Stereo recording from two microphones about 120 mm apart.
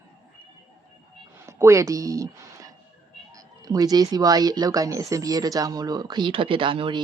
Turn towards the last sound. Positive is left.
turn(degrees=-45)  # may be behind; listen again after turning